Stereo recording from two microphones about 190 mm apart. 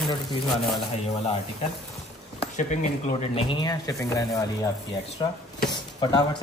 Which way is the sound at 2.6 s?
40° left (ahead or behind).